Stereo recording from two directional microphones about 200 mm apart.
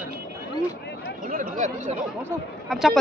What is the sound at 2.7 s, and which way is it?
Speech, centre (ahead or behind).